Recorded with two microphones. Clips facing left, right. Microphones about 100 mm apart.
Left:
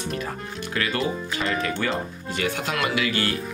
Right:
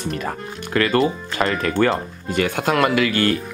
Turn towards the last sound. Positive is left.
turn(degrees=-50)  # may be behind; listen again after turning